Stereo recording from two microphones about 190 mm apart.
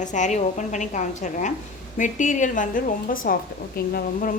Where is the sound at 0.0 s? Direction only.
40° left (ahead or behind).